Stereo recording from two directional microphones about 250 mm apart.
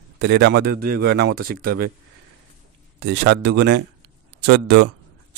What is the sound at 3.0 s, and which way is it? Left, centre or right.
A man's voice, right.